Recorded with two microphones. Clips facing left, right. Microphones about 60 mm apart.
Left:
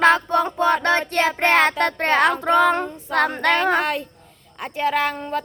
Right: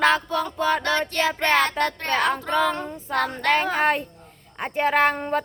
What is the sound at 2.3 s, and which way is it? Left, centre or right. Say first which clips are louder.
Child singing: left 6 dB; left.